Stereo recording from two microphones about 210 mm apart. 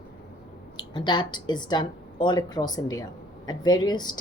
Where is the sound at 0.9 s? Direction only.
20° left (ahead or behind).